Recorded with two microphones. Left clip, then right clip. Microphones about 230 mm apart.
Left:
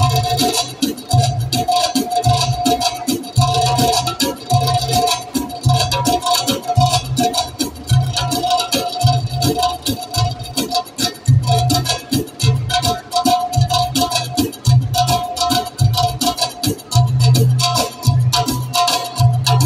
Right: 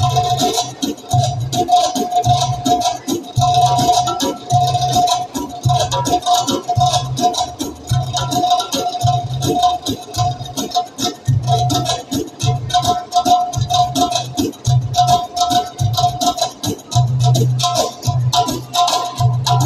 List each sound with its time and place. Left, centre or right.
0.0 s music: left
10.5 s music: left